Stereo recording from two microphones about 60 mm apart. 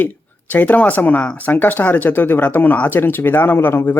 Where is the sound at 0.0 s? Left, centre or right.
Left.